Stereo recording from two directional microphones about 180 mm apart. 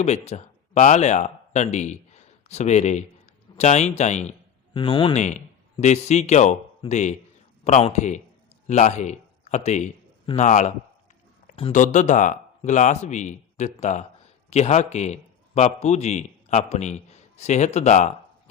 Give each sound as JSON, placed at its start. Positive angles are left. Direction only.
{"t": 0.0, "sound": "speech", "side_deg": 40}
{"t": 4.8, "sound": "speech", "side_deg": 30}
{"t": 5.1, "sound": "a man's voice", "side_deg": 40}
{"t": 11.7, "sound": "a man's voice", "side_deg": 45}